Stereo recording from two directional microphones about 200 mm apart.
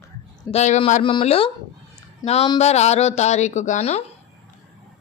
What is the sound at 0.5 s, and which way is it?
Speech, 35° left (ahead or behind).